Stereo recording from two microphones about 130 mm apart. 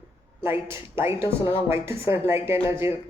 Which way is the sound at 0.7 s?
20° right (ahead or behind).